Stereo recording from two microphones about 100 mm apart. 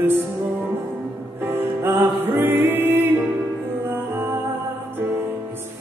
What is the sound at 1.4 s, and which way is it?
Music, 20° right (ahead or behind).